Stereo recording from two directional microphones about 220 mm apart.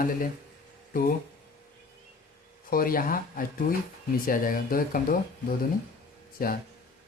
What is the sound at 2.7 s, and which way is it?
Speech, 40° left (ahead or behind).